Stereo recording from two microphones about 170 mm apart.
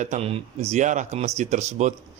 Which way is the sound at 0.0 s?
40° right (ahead or behind).